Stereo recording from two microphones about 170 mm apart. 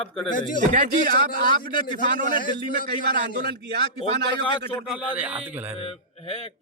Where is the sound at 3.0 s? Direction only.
60° right (ahead or behind).